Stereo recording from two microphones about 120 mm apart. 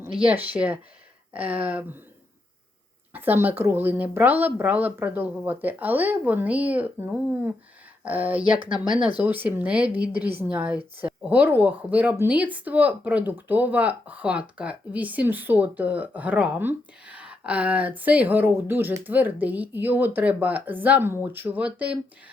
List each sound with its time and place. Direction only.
0.2 s speech: 10° right (ahead or behind)
3.1 s speech: 15° right (ahead or behind)